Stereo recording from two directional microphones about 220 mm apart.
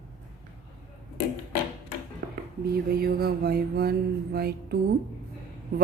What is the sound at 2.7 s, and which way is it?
Mantra, 45° right (ahead or behind).